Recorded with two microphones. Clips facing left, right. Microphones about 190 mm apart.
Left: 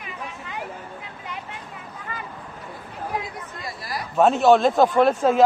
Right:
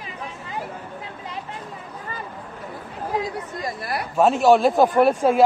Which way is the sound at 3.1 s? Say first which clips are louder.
Right 8 dB; 40° right (ahead or behind).